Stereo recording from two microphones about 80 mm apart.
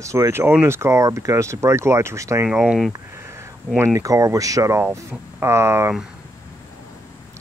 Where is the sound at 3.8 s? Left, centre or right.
Right.